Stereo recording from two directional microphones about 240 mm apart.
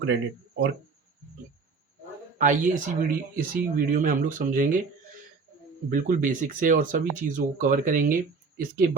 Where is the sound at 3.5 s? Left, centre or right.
Right.